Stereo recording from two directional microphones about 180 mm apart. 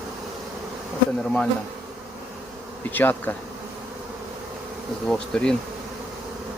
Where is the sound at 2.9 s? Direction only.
10° left (ahead or behind).